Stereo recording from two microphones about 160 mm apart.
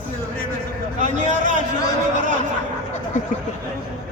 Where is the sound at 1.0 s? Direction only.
50° right (ahead or behind).